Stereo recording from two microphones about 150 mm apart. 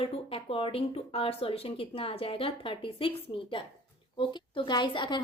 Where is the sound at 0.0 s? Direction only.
40° left (ahead or behind).